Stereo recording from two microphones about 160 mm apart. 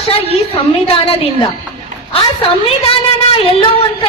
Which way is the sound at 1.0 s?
35° left (ahead or behind).